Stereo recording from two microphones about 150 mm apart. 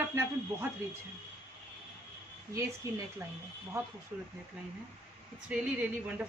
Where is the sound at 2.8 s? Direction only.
20° right (ahead or behind).